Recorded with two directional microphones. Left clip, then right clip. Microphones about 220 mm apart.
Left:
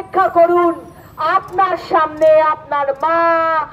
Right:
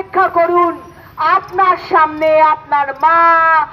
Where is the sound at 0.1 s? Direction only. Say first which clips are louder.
Even; 60° left (ahead or behind).